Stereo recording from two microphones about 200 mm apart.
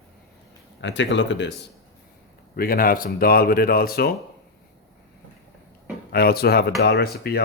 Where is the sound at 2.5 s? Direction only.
45° left (ahead or behind).